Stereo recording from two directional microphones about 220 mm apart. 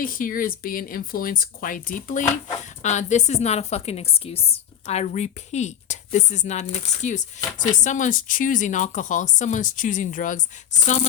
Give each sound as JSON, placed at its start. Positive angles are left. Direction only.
{"t": 0.0, "sound": "a woman's voice", "side_deg": 40}